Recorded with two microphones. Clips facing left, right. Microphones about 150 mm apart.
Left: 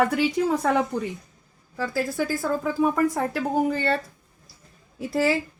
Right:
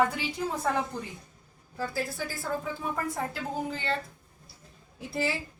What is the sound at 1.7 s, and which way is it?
A woman's voice, 90° left.